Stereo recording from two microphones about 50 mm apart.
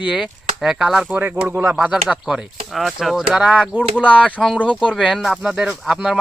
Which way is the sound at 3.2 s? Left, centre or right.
Centre.